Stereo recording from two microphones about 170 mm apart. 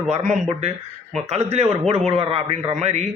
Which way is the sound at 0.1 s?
45° right (ahead or behind).